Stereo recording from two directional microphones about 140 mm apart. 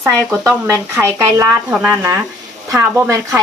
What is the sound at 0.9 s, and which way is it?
Speech, 20° right (ahead or behind).